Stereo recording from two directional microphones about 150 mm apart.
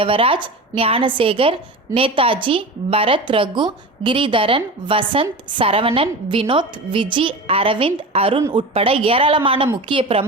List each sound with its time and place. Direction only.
0.0 s a woman's voice: 35° right (ahead or behind)